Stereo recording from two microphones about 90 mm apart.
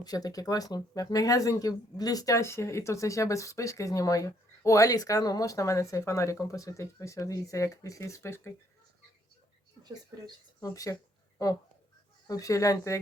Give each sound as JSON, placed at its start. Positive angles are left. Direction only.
{"t": 0.0, "sound": "speech", "side_deg": 45}
{"t": 10.6, "sound": "speech", "side_deg": 40}
{"t": 12.3, "sound": "speech", "side_deg": 40}